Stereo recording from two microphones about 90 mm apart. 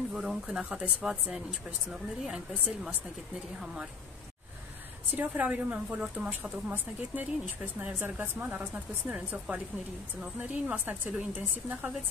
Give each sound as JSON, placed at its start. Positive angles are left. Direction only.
{"t": 0.1, "sound": "speech", "side_deg": -5}
{"t": 5.1, "sound": "speech", "side_deg": -20}